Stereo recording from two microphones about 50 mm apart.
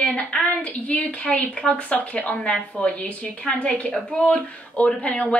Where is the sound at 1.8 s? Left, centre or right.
Left.